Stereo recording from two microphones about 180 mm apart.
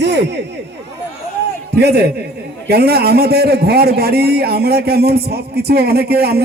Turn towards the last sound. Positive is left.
turn(degrees=-60)  # may be behind; listen again after turning